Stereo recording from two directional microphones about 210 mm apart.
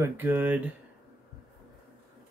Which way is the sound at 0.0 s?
10° right (ahead or behind).